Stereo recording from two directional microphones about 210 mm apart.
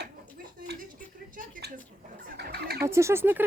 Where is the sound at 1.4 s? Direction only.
40° right (ahead or behind).